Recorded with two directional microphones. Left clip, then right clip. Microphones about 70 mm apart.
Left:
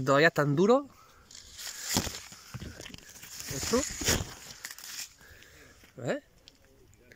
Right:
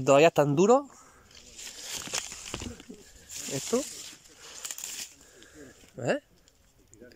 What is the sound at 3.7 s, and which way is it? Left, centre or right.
Speech, centre.